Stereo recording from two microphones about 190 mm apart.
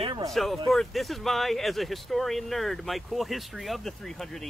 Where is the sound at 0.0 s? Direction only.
25° right (ahead or behind).